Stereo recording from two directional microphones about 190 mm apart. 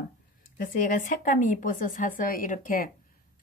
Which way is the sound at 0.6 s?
45° left (ahead or behind).